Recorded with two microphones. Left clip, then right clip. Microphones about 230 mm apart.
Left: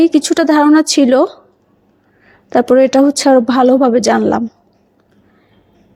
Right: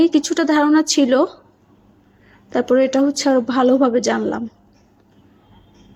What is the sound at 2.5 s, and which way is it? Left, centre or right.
A woman's voice, left.